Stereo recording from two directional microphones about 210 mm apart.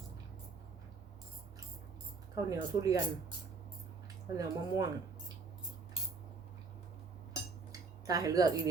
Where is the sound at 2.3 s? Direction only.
15° right (ahead or behind).